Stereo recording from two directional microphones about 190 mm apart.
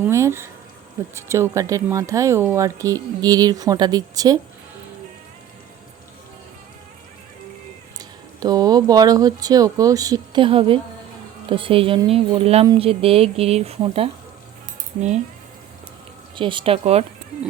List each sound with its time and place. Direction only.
0.0 s a sound: 15° right (ahead or behind)
1.1 s speech: 15° right (ahead or behind)
7.9 s speech: 20° right (ahead or behind)
16.3 s speech: 25° right (ahead or behind)